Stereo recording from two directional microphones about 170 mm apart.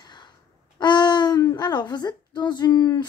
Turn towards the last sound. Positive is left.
turn(degrees=20)  # may be behind; listen again after turning